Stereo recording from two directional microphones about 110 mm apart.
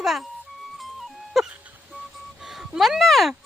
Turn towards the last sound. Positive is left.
turn(degrees=0)  # may be behind; listen again after turning